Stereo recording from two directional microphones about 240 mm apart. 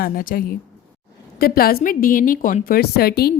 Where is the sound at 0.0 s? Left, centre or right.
Left.